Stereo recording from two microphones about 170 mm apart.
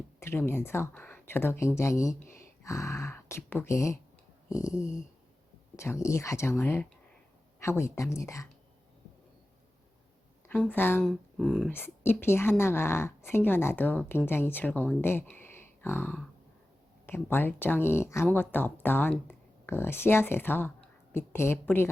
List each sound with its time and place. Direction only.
0.2 s speech: 15° left (ahead or behind)
4.4 s a sound: 20° left (ahead or behind)
5.7 s speech: 15° left (ahead or behind)
10.5 s speech: 10° left (ahead or behind)
11.3 s speech: centre (ahead or behind)
11.7 s speech: 15° left (ahead or behind)